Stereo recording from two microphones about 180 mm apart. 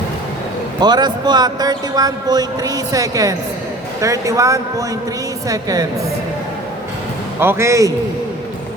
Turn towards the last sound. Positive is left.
turn(degrees=-15)  # may be behind; listen again after turning